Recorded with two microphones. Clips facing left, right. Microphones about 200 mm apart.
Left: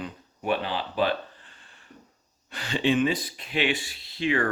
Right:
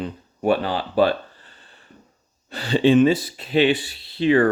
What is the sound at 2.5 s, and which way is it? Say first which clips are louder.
Speech: right 8 dB; 35° right (ahead or behind).